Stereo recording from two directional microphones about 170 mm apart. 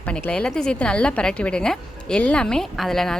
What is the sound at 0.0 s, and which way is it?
A woman's voice, 10° left (ahead or behind).